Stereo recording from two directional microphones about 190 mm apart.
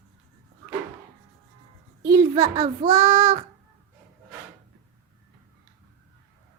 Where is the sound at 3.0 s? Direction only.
20° right (ahead or behind).